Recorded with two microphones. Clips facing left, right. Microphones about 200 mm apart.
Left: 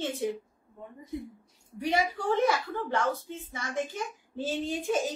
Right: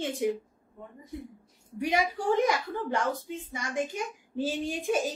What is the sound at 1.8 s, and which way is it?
A woman's voice, 10° right (ahead or behind).